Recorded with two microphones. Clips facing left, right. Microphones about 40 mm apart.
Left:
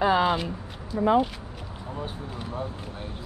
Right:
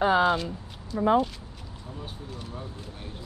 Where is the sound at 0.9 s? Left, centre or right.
Centre.